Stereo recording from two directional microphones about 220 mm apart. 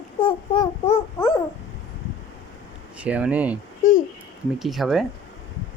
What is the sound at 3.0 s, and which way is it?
Speech, 5° right (ahead or behind).